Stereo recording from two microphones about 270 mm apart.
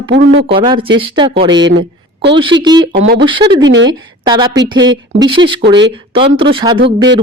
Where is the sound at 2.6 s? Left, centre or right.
Centre.